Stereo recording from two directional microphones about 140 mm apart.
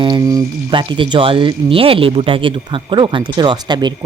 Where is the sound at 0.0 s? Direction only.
30° right (ahead or behind).